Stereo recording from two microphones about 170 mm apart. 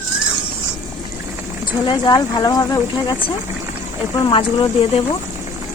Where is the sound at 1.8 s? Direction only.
25° left (ahead or behind).